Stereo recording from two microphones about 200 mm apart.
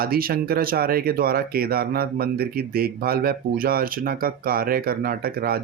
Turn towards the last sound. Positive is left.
turn(degrees=-50)  # may be behind; listen again after turning